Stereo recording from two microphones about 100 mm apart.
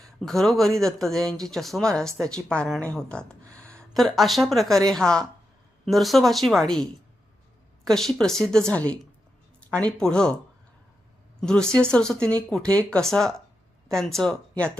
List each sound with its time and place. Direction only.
0.0 s speech: 5° left (ahead or behind)
2.8 s a sound: 10° left (ahead or behind)
3.9 s speech: centre (ahead or behind)
7.9 s speech: 5° left (ahead or behind)
11.3 s a woman's voice: 5° left (ahead or behind)